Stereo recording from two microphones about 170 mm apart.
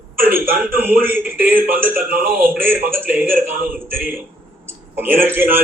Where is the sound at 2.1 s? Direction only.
60° right (ahead or behind).